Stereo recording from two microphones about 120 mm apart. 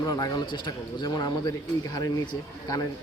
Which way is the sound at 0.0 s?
35° left (ahead or behind).